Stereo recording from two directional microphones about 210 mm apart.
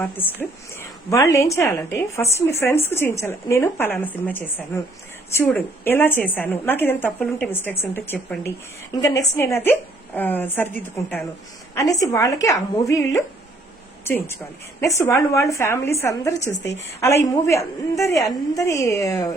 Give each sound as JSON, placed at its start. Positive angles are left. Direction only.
{"t": 0.0, "sound": "a woman's voice", "side_deg": 10}
{"t": 14.8, "sound": "a woman's voice", "side_deg": 15}